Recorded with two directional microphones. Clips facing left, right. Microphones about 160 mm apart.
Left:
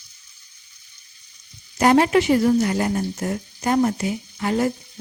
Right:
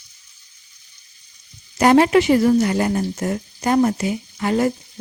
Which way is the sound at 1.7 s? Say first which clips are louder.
Right 3 dB; 90° right.